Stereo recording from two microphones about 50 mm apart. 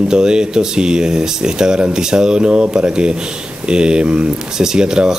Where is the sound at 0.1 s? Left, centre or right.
Centre.